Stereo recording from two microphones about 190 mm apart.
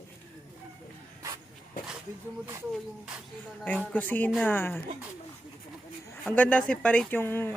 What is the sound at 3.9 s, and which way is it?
Speech, 10° left (ahead or behind).